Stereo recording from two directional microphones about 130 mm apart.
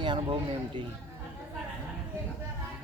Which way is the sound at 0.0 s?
40° right (ahead or behind).